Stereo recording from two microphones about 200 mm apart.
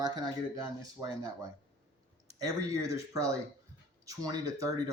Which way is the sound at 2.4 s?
15° right (ahead or behind).